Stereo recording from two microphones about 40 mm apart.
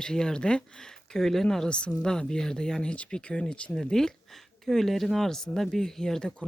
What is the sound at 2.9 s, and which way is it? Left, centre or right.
Speech, left.